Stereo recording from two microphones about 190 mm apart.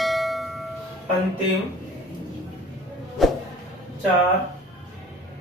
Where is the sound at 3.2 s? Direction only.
Centre (ahead or behind).